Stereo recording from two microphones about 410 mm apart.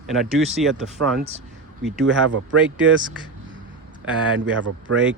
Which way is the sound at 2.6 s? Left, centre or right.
Centre.